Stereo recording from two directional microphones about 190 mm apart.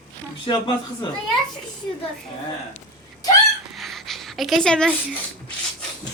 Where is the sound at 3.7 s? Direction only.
Centre (ahead or behind).